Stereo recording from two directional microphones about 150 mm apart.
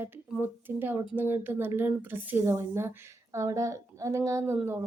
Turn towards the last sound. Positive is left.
turn(degrees=-20)  # may be behind; listen again after turning